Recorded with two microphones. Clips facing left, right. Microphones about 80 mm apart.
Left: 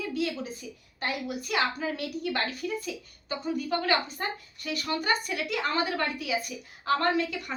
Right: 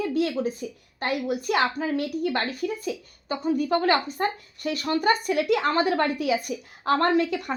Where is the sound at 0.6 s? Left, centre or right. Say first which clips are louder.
Right 4 dB; right.